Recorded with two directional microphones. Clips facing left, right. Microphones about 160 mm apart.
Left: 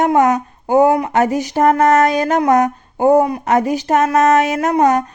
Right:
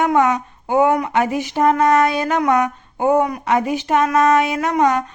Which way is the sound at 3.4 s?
40° left (ahead or behind).